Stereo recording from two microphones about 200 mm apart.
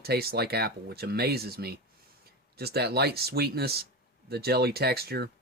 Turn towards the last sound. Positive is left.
turn(degrees=-50)  # may be behind; listen again after turning